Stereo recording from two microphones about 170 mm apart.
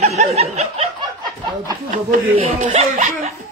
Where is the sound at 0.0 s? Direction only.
40° right (ahead or behind).